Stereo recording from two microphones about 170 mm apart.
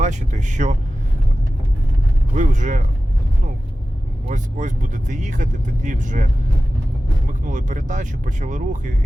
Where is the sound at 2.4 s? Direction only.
45° right (ahead or behind).